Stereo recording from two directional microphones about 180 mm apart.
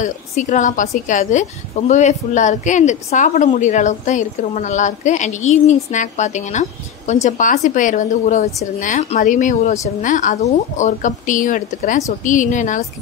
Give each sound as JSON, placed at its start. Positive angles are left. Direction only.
{"t": 0.0, "sound": "a woman's voice", "side_deg": 45}